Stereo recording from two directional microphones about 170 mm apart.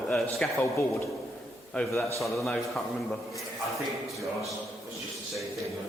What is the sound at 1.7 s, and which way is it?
A man's voice, 10° left (ahead or behind).